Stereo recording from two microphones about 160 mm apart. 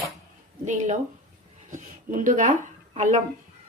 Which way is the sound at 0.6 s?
50° right (ahead or behind).